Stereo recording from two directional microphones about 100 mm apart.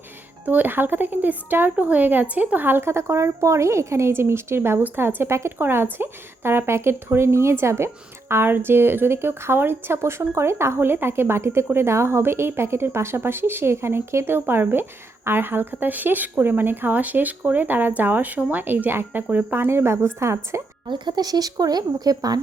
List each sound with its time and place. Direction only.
0.4 s speech: 20° right (ahead or behind)
20.8 s speech: 50° right (ahead or behind)